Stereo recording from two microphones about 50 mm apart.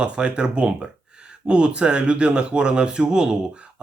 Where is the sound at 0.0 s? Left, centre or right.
Right.